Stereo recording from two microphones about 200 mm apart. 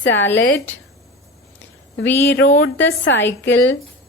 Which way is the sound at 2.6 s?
75° left (ahead or behind).